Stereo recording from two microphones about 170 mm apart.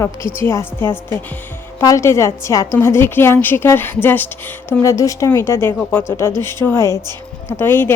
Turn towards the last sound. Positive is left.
turn(degrees=10)  # may be behind; listen again after turning